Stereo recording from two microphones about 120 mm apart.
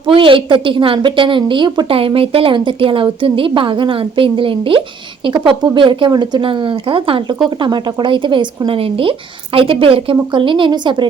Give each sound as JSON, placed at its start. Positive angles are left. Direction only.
{"t": 0.1, "sound": "a woman's voice", "side_deg": -45}
{"t": 2.0, "sound": "a woman's voice", "side_deg": -50}